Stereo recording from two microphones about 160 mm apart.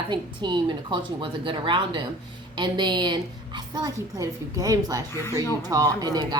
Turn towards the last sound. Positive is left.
turn(degrees=-25)  # may be behind; listen again after turning